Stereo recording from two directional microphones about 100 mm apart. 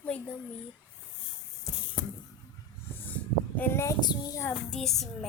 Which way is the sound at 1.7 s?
35° left (ahead or behind).